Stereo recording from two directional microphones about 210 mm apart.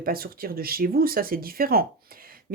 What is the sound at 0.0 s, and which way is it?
Speech, 45° right (ahead or behind).